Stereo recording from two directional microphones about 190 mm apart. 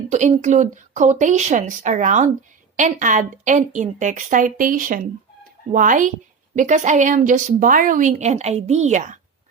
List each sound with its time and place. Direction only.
0.1 s a woman's voice: 40° right (ahead or behind)